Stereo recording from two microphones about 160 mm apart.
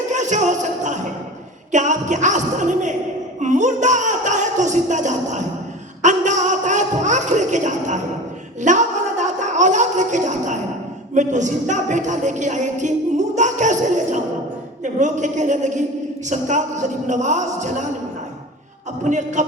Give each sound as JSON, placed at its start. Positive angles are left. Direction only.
{"t": 0.1, "sound": "music", "side_deg": -50}
{"t": 1.7, "sound": "a woman's voice", "side_deg": -50}
{"t": 3.4, "sound": "music", "side_deg": -50}
{"t": 6.0, "sound": "a sound", "side_deg": -50}
{"t": 8.6, "sound": "a man's voice", "side_deg": -50}
{"t": 19.0, "sound": "a woman's voice", "side_deg": -50}